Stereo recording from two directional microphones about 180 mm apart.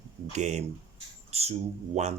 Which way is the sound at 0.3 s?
40° right (ahead or behind).